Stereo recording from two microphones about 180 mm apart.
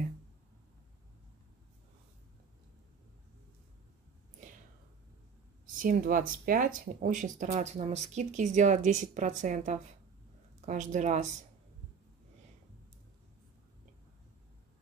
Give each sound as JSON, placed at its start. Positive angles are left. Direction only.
{"t": 5.8, "sound": "speech", "side_deg": -50}